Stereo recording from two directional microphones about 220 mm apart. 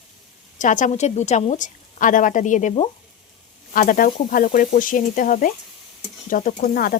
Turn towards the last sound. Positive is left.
turn(degrees=40)  # may be behind; listen again after turning